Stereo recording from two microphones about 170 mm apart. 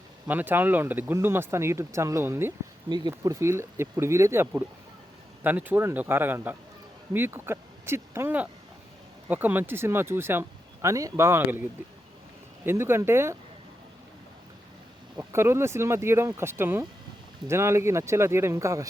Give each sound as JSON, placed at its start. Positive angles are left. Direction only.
{"t": 0.3, "sound": "speech", "side_deg": -10}
{"t": 15.2, "sound": "speech", "side_deg": -15}